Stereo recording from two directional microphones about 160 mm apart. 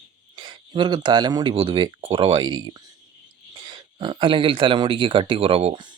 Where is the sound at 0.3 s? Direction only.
30° right (ahead or behind).